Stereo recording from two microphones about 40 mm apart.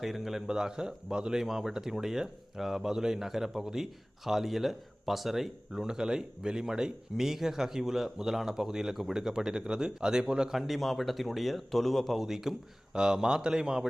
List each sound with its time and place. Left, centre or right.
0.0 s a man's voice: centre
5.8 s speech: centre
10.5 s a man's voice: centre
12.2 s speech: centre